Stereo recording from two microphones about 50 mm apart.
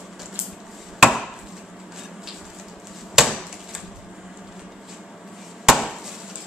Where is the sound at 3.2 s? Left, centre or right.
Centre.